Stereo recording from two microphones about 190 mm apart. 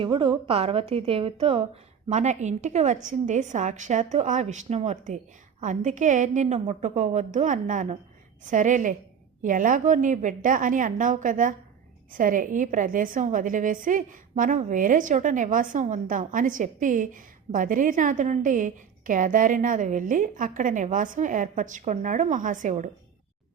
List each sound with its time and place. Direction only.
0.0 s a woman's voice: 25° right (ahead or behind); by 22.9 s 40° right (ahead or behind)